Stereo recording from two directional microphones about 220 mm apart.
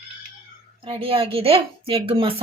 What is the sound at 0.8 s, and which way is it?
A woman's voice, 25° right (ahead or behind).